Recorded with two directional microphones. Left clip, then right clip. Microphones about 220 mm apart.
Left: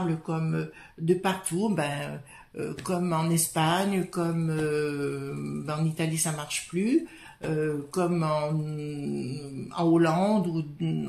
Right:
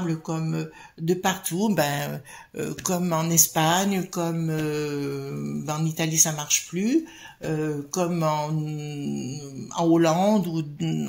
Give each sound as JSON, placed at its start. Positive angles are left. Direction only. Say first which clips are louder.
{"t": 0.1, "sound": "speech", "louder": "right 2 dB", "side_deg": -30}